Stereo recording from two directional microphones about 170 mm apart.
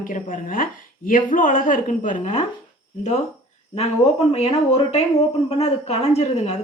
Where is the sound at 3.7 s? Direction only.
35° left (ahead or behind).